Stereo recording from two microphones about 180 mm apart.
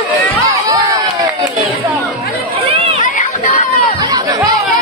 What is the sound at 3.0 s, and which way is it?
Crowd, 45° left (ahead or behind).